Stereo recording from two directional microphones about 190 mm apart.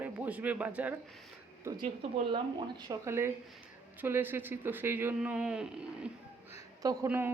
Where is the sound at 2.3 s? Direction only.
20° right (ahead or behind).